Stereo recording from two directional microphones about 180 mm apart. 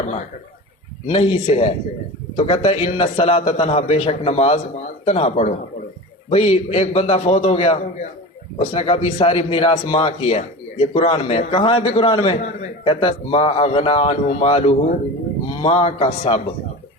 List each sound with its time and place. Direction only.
0.0 s a man's voice: 40° left (ahead or behind)